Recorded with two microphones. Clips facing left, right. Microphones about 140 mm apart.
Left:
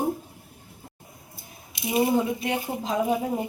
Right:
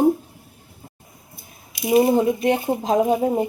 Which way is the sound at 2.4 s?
45° right (ahead or behind).